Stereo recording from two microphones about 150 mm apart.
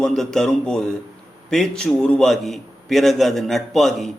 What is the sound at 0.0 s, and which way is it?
A man's voice, 5° left (ahead or behind).